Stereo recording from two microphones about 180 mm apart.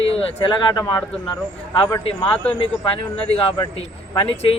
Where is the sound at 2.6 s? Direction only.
30° left (ahead or behind).